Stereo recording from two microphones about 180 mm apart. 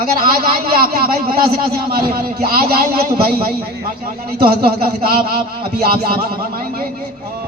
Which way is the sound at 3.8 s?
60° right (ahead or behind).